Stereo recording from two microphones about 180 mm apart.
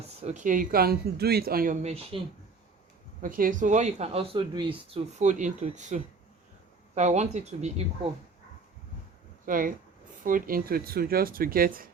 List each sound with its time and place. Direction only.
0.2 s speech: 40° right (ahead or behind)
3.2 s speech: 50° right (ahead or behind); by 4.8 s 25° right (ahead or behind)
5.2 s speech: 40° right (ahead or behind)
9.5 s speech: 50° right (ahead or behind)